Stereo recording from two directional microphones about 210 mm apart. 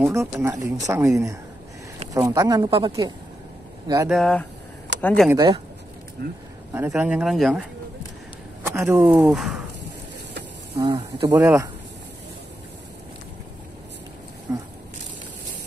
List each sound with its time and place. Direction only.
0.0 s speech: 10° right (ahead or behind)
4.1 s speech: 5° left (ahead or behind)
5.3 s speech: 15° right (ahead or behind)
6.2 s speech: 50° right (ahead or behind)
6.9 s speech: 5° right (ahead or behind)
8.6 s speech: 15° right (ahead or behind)
10.8 s speech: 25° right (ahead or behind)
14.5 s a sound: 15° right (ahead or behind)